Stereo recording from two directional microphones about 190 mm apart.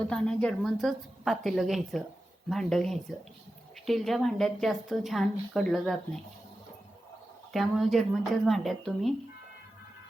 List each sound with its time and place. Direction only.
0.1 s a woman's voice: 5° left (ahead or behind)
7.5 s a woman's voice: centre (ahead or behind)